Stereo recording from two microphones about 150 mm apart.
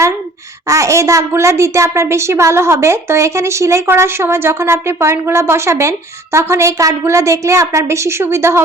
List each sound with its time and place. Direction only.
0.7 s a woman's voice: 20° right (ahead or behind)